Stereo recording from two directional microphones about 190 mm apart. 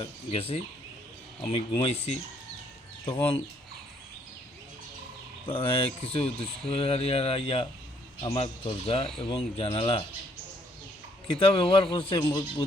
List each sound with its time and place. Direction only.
0.0 s speech: 30° left (ahead or behind)
5.5 s speech: 30° left (ahead or behind)
11.3 s speech: 30° left (ahead or behind)